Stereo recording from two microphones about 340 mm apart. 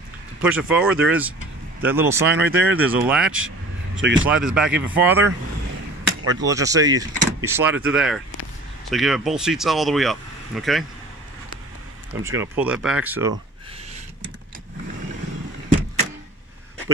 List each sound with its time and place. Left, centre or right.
0.4 s speech: centre
3.3 s vehicle: right
4.3 s speech: centre
6.4 s speech: centre
12.3 s speech: centre